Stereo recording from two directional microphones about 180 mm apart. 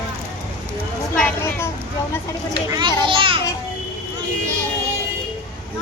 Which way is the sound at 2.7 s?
25° right (ahead or behind).